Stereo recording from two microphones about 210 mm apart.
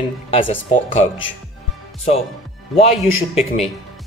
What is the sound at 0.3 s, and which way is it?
Speech, 25° left (ahead or behind).